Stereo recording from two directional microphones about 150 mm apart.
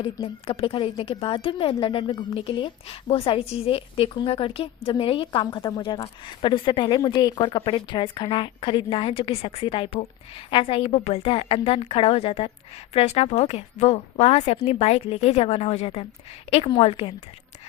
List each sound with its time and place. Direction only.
0.0 s a woman's voice: 35° left (ahead or behind)